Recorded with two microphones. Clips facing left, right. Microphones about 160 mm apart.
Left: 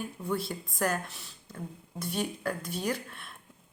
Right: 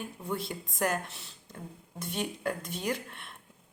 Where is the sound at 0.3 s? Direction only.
20° right (ahead or behind).